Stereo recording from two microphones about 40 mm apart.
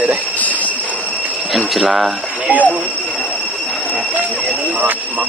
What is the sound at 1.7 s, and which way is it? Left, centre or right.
Speech, centre.